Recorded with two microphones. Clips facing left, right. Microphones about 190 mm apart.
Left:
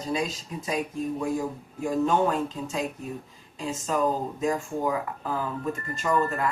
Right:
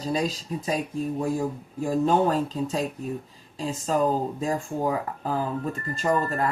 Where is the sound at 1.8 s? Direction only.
35° right (ahead or behind).